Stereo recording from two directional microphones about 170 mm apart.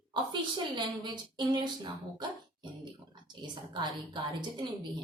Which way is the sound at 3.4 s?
25° right (ahead or behind).